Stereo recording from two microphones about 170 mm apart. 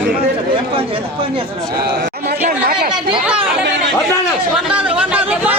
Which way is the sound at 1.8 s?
65° right (ahead or behind).